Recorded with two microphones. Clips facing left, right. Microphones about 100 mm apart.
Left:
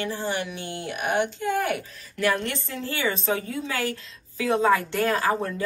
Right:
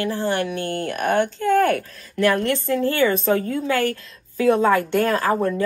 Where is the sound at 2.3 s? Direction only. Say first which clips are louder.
Right 9 dB; 40° right (ahead or behind).